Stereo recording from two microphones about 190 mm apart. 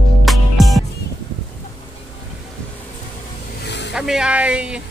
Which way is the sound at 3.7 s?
65° left (ahead or behind).